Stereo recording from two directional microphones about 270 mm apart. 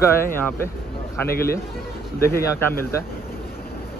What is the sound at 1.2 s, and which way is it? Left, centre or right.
Speech, left.